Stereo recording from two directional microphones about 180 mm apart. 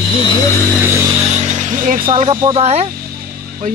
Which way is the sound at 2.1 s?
35° right (ahead or behind).